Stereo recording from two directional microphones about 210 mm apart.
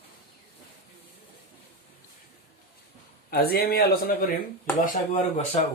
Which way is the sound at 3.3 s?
45° left (ahead or behind).